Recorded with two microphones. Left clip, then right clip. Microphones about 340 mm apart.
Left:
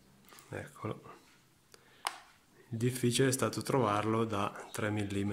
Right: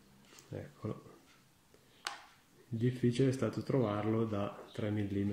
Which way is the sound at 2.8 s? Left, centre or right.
Left.